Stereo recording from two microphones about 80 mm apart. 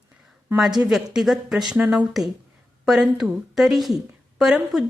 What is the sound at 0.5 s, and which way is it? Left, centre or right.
Speech, centre.